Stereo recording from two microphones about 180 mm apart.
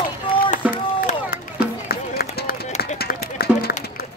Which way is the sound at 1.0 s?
55° left (ahead or behind).